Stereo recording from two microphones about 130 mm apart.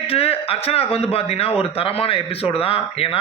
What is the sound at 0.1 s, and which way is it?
A man's voice, 50° left (ahead or behind).